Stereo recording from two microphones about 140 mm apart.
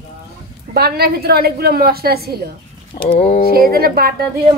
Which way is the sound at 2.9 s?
75° left (ahead or behind).